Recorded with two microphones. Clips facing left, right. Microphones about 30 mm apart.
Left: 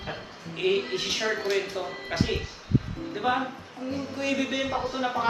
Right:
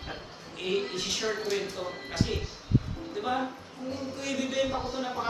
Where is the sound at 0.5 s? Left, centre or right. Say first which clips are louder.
Left 5 dB; left.